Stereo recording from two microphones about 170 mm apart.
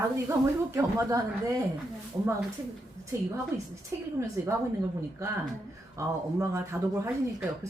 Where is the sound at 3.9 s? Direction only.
15° right (ahead or behind).